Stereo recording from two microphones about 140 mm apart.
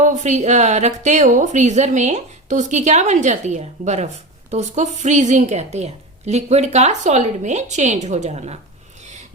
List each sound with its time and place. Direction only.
0.0 s a woman's voice: 60° right (ahead or behind)